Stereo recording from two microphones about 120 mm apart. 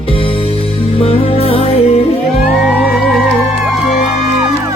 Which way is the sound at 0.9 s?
55° left (ahead or behind).